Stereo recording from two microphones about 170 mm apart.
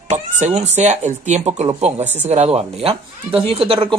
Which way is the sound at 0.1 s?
45° right (ahead or behind).